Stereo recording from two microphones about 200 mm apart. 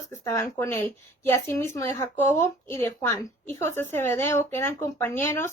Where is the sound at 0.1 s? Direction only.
10° left (ahead or behind).